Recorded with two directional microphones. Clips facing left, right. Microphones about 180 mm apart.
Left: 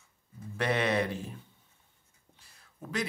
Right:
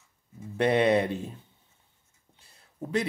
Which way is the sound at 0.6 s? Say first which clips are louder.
Right 6 dB; 25° right (ahead or behind).